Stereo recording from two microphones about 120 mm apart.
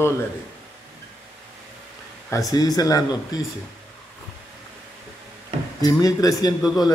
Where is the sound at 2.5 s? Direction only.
30° left (ahead or behind).